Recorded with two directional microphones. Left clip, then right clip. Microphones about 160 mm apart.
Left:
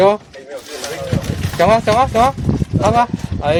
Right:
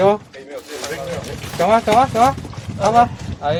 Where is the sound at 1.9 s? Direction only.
60° left (ahead or behind).